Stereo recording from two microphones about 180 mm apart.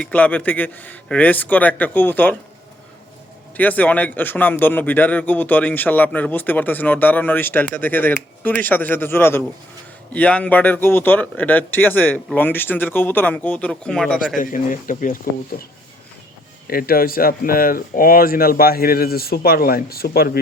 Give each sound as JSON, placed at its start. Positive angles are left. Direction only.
{"t": 0.0, "sound": "a man's voice", "side_deg": 10}
{"t": 3.6, "sound": "a man's voice", "side_deg": 10}
{"t": 14.3, "sound": "speech", "side_deg": 45}
{"t": 16.6, "sound": "speech", "side_deg": 55}